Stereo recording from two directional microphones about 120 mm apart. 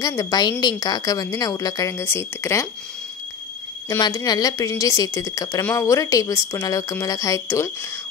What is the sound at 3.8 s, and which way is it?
A woman's voice, 30° left (ahead or behind).